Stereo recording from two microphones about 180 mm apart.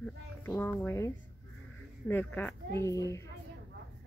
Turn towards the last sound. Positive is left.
turn(degrees=20)  # may be behind; listen again after turning